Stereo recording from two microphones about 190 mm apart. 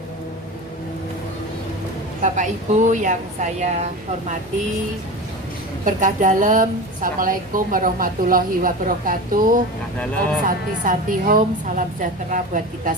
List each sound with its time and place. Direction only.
2.2 s a woman's voice: 40° right (ahead or behind)
5.8 s a woman's voice: 40° right (ahead or behind)